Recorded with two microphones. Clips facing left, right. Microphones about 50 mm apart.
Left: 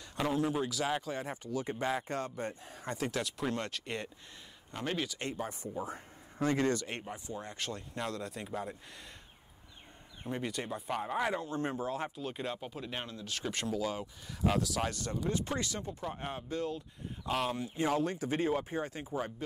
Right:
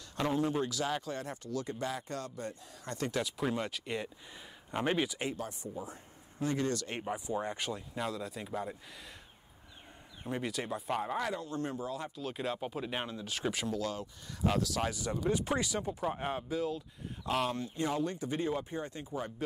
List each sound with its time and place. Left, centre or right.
0.2 s speech: centre
0.8 s speech: centre
1.7 s speech: left
3.0 s speech: centre
4.6 s speech: centre
6.4 s speech: left
6.9 s speech: centre
7.2 s speech: centre
7.7 s speech: centre
10.2 s speech: centre
11.1 s speech: left
12.2 s speech: centre
13.7 s speech: centre
17.8 s speech: left